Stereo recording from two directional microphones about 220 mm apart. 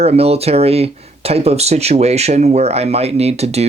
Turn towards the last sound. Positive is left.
turn(degrees=-30)  # may be behind; listen again after turning